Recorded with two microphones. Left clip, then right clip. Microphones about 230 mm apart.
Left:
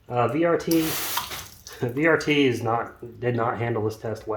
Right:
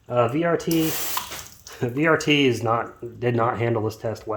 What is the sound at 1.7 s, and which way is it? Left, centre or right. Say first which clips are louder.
Speech: right 1 dB; right.